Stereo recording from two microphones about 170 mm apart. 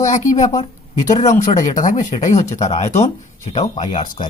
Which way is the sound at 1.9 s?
45° left (ahead or behind).